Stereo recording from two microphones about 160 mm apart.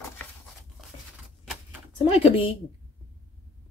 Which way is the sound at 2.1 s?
35° left (ahead or behind).